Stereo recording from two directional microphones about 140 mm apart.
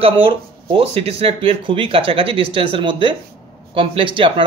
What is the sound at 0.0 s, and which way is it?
Speech, 40° right (ahead or behind).